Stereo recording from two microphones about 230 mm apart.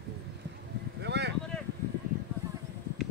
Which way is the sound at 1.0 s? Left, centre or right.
Right.